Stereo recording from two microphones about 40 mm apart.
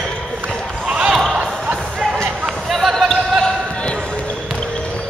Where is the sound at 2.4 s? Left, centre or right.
Centre.